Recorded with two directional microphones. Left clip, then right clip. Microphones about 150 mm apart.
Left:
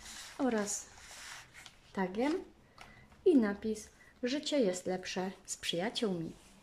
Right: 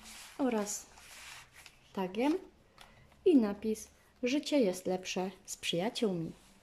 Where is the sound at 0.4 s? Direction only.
10° right (ahead or behind).